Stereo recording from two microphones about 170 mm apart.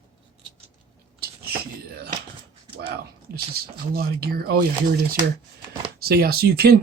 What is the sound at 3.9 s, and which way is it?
Speech, 65° right (ahead or behind).